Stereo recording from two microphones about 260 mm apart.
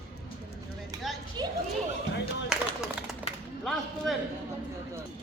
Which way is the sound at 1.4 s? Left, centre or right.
Centre.